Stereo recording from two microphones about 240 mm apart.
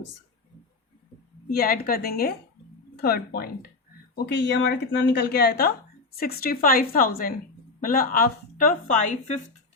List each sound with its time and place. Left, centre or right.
1.5 s speech: left